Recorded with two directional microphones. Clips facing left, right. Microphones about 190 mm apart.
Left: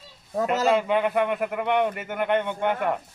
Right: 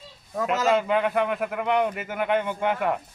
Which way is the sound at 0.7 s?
Centre (ahead or behind).